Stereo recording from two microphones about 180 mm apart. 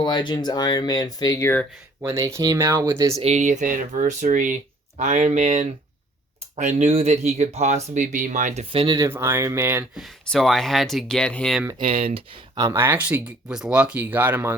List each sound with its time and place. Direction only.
0.0 s speech: 25° left (ahead or behind)
2.0 s speech: 20° right (ahead or behind)
3.2 s speech: 35° right (ahead or behind)
8.7 s speech: 25° right (ahead or behind)
9.0 s speech: 15° right (ahead or behind)
10.0 s speech: centre (ahead or behind)
11.8 s speech: 35° right (ahead or behind)
12.5 s speech: 15° right (ahead or behind)